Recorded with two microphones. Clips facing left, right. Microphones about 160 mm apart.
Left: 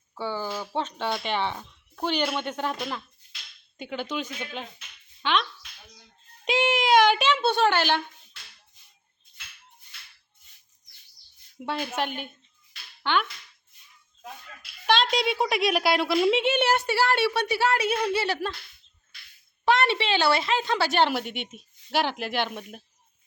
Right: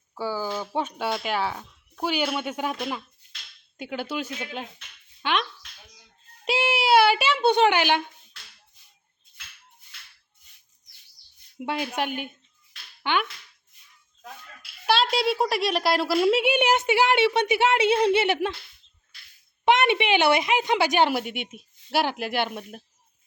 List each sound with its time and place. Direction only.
0.2 s a woman's voice: 5° right (ahead or behind)
6.4 s a sound: 5° right (ahead or behind)
11.6 s a woman's voice: 10° right (ahead or behind)
14.8 s a woman's voice: 5° right (ahead or behind)
19.6 s a woman's voice: 20° right (ahead or behind)